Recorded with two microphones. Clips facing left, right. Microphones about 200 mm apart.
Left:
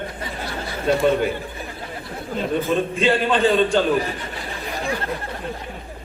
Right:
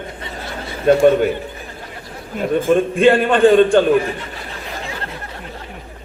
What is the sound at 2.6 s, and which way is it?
A man's voice, 50° right (ahead or behind).